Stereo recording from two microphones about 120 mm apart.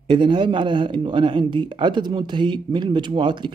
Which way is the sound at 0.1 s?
45° right (ahead or behind).